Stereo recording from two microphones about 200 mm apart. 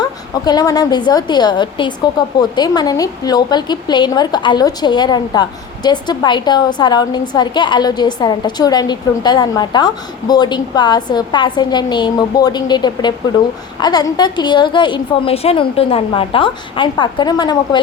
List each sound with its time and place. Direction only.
0.0 s a woman's voice: 20° left (ahead or behind)